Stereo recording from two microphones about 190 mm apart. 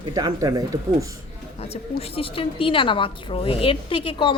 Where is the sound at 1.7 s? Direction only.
30° left (ahead or behind).